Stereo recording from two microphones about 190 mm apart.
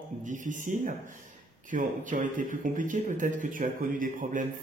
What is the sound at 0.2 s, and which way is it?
Speech, 40° right (ahead or behind).